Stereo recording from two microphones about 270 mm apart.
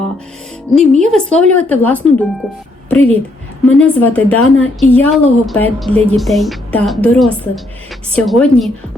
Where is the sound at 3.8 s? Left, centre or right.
Centre.